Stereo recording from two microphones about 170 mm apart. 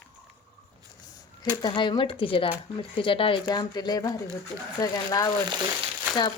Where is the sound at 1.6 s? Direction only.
30° left (ahead or behind).